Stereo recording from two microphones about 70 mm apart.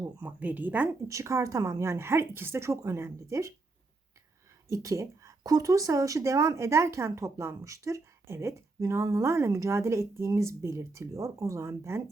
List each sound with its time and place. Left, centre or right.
0.2 s a woman's voice: right
1.0 s speech: right
1.8 s speech: right
4.7 s speech: right
5.4 s speech: right